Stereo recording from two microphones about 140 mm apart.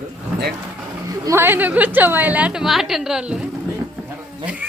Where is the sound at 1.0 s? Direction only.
20° right (ahead or behind); by 3.4 s 5° right (ahead or behind).